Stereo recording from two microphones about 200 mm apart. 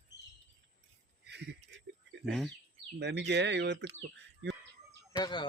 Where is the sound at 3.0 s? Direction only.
60° right (ahead or behind).